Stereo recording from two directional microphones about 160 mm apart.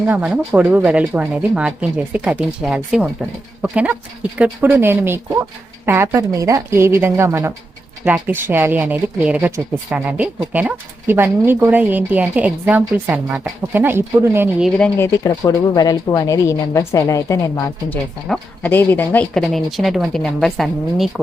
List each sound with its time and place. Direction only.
0.0 s speech: 10° right (ahead or behind)
14.9 s speech: 20° left (ahead or behind); by 21.1 s centre (ahead or behind)